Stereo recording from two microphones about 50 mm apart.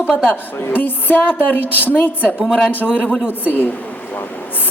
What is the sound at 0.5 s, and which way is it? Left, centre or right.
A woman's voice, left.